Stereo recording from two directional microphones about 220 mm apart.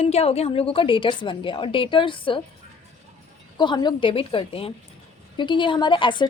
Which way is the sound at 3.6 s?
20° left (ahead or behind).